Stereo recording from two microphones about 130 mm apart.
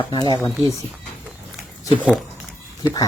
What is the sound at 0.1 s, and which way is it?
Speech, 35° left (ahead or behind).